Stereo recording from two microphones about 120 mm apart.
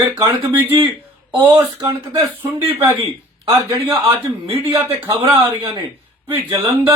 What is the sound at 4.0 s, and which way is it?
Speech, 45° right (ahead or behind).